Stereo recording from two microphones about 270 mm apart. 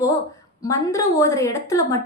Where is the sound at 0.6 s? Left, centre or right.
Centre.